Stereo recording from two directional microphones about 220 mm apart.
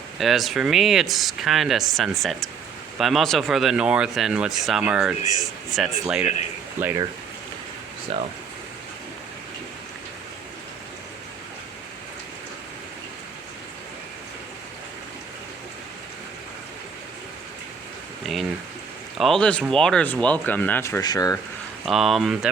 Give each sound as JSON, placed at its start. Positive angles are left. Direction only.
{"t": 0.2, "sound": "speech", "side_deg": 0}
{"t": 8.1, "sound": "speech", "side_deg": -25}
{"t": 19.1, "sound": "speech", "side_deg": 0}
{"t": 21.8, "sound": "speech", "side_deg": 0}